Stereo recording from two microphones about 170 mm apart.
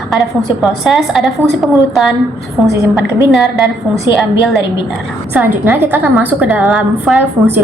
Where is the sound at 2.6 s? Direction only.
20° right (ahead or behind).